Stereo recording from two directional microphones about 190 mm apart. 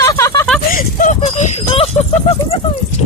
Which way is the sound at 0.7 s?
45° left (ahead or behind).